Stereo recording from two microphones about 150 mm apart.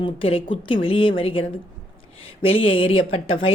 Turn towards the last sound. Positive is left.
turn(degrees=40)  # may be behind; listen again after turning